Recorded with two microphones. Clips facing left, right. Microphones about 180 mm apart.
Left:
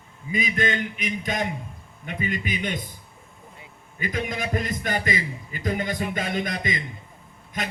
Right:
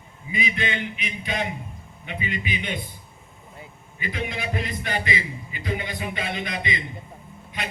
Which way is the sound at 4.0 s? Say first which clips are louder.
Left 2 dB; 45° left (ahead or behind).